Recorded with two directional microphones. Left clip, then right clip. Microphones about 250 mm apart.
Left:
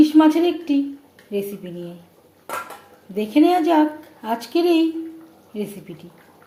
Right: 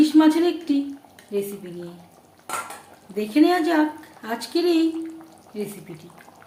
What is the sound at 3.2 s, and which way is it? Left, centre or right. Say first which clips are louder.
A woman's voice: left 2 dB; centre.